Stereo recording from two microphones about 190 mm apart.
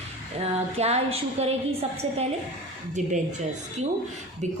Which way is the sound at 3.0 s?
40° right (ahead or behind).